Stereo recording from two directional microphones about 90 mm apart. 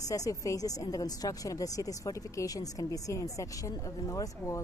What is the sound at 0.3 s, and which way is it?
Speech, 40° left (ahead or behind).